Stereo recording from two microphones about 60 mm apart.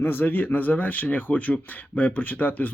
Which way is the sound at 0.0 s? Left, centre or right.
Left.